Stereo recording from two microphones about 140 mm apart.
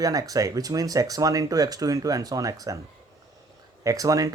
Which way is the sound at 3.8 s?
25° right (ahead or behind).